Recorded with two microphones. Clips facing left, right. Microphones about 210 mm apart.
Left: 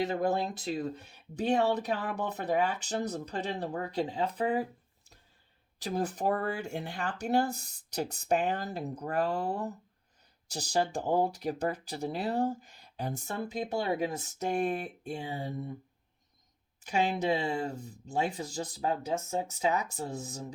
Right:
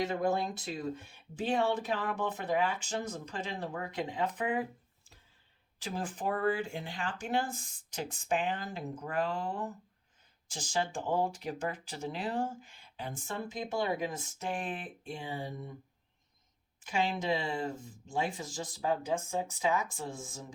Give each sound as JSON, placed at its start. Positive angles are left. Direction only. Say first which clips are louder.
{"t": 0.0, "sound": "speech", "louder": "left 2 dB", "side_deg": 35}
{"t": 5.8, "sound": "speech", "louder": "left 5 dB", "side_deg": 40}
{"t": 16.8, "sound": "speech", "louder": "left 3 dB", "side_deg": 40}